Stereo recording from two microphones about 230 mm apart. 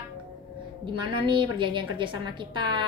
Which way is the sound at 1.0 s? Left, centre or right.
Right.